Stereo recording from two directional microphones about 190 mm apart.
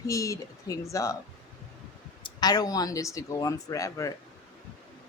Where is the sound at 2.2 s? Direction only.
20° left (ahead or behind).